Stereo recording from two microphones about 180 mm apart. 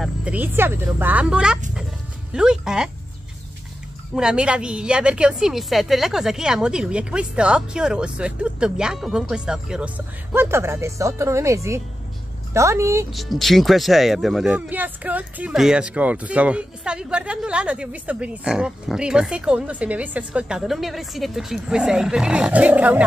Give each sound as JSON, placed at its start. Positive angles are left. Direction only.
{"t": 0.0, "sound": "speech", "side_deg": -5}
{"t": 4.1, "sound": "speech", "side_deg": -5}
{"t": 13.1, "sound": "speech", "side_deg": 0}